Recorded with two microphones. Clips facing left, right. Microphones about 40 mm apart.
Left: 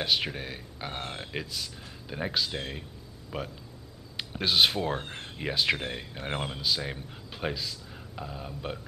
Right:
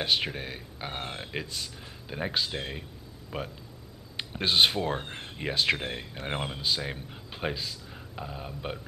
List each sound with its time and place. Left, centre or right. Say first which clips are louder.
0.0 s speech: even; centre